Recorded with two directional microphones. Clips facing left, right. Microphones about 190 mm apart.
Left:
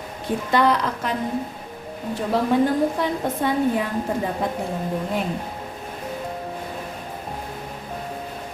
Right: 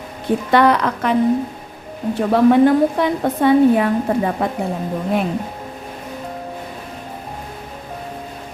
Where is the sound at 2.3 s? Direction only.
65° right (ahead or behind).